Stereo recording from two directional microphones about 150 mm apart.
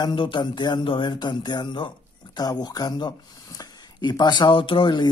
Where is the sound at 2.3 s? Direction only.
25° left (ahead or behind).